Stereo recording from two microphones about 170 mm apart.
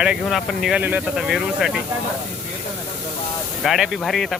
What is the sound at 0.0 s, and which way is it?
Speech, centre (ahead or behind).